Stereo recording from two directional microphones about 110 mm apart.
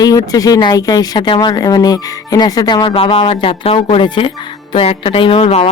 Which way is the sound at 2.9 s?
55° left (ahead or behind).